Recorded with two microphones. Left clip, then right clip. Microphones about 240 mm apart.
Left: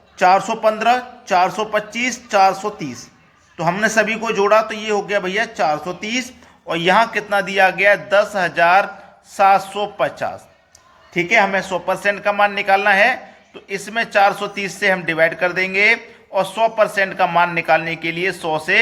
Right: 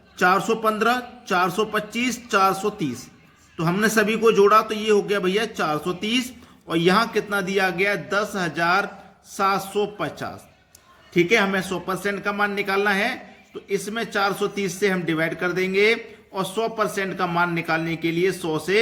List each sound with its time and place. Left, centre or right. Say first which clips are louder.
0.2 s a man's voice: left 5 dB; centre